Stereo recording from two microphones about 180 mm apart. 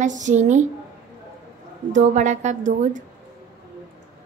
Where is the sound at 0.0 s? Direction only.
40° right (ahead or behind).